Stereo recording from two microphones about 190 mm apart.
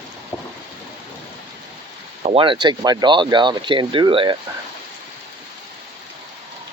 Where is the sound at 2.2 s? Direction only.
30° right (ahead or behind).